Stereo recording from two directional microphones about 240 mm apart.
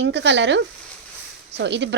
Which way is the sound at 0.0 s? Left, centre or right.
Right.